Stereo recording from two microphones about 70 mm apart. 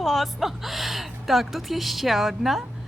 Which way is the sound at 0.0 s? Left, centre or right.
Centre.